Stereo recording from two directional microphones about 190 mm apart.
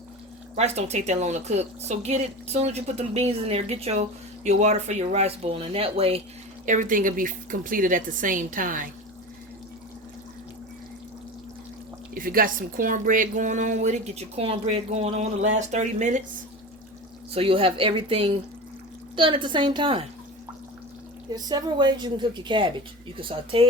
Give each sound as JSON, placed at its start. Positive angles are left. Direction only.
{"t": 0.5, "sound": "speech", "side_deg": -35}
{"t": 6.7, "sound": "a woman's voice", "side_deg": -45}
{"t": 12.1, "sound": "speech", "side_deg": -50}
{"t": 17.3, "sound": "a woman's voice", "side_deg": -30}
{"t": 21.3, "sound": "a woman's voice", "side_deg": -20}